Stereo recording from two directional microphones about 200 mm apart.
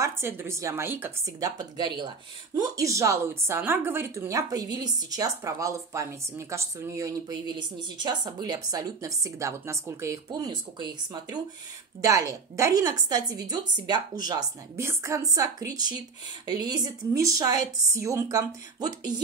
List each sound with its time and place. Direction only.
0.0 s a woman's voice: 15° right (ahead or behind)